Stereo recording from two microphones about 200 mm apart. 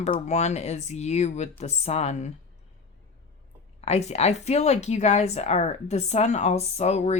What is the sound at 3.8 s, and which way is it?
Speech, 30° left (ahead or behind).